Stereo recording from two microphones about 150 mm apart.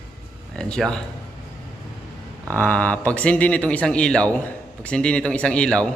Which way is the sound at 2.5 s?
10° left (ahead or behind).